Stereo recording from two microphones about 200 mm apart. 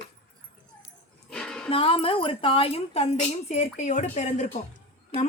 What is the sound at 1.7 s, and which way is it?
A woman's voice, 30° left (ahead or behind).